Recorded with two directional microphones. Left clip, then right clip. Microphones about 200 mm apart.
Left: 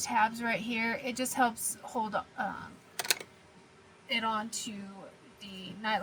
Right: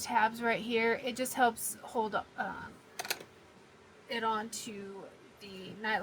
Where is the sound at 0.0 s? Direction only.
25° right (ahead or behind).